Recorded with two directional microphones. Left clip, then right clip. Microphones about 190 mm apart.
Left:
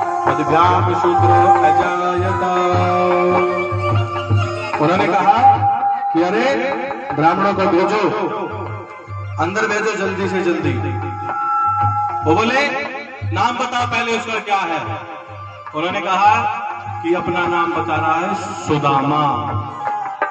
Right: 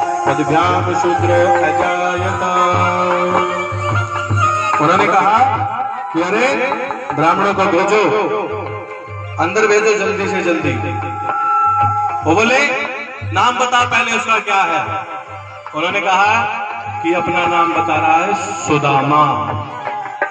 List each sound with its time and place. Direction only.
0.2 s music: 45° right (ahead or behind)
9.4 s music: 35° right (ahead or behind)
12.3 s music: 35° right (ahead or behind)